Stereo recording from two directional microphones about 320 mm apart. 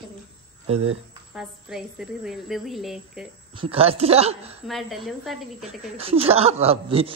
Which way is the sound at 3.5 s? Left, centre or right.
Centre.